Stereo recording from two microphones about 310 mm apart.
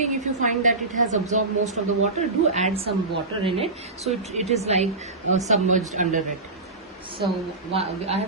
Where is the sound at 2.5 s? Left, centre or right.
Right.